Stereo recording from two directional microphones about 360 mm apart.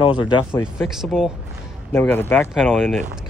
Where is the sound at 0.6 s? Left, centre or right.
Centre.